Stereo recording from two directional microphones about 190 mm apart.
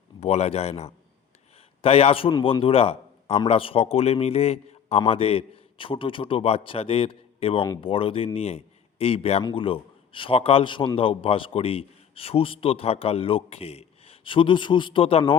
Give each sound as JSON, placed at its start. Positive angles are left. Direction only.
{"t": 0.2, "sound": "a man's voice", "side_deg": 35}